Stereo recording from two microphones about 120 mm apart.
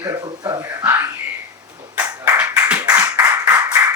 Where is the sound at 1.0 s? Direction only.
30° right (ahead or behind).